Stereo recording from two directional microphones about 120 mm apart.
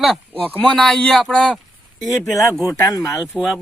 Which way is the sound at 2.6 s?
25° left (ahead or behind).